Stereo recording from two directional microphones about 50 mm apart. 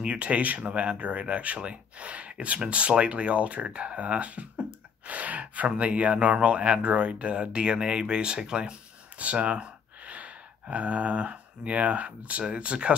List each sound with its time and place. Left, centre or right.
0.0 s speech: right
9.2 s speech: right